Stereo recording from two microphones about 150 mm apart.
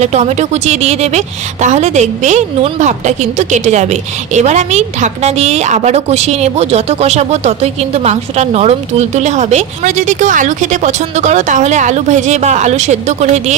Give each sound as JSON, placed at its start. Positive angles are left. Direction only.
{"t": 0.0, "sound": "a woman's voice", "side_deg": -50}